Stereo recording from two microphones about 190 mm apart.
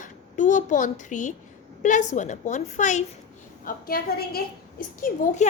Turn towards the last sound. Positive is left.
turn(degrees=40)  # may be behind; listen again after turning